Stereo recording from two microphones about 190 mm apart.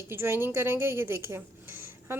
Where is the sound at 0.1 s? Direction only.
10° right (ahead or behind).